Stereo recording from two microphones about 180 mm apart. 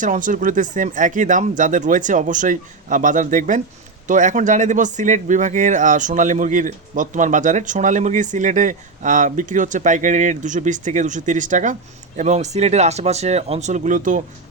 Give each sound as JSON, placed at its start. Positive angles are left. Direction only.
{"t": 0.0, "sound": "speech", "side_deg": -45}